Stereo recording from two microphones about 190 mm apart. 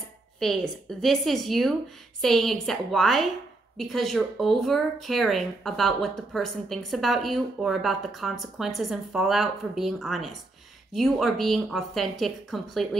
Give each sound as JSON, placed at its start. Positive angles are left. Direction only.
{"t": 0.4, "sound": "speech", "side_deg": 0}